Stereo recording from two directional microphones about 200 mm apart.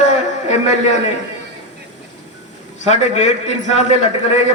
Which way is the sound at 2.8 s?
35° left (ahead or behind).